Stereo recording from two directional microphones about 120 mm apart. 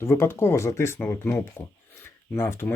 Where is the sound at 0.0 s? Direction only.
20° left (ahead or behind).